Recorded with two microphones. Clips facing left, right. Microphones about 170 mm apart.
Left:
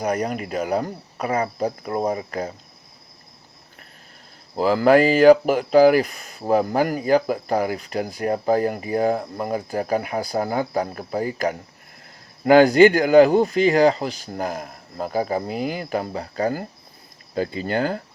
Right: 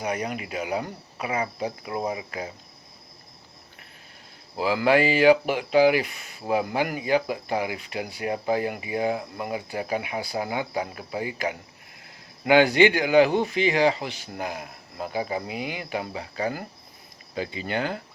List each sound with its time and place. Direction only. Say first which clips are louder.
0.0 s speech: left 5 dB; 45° left (ahead or behind)
4.5 s speech: left 5 dB; 40° left (ahead or behind)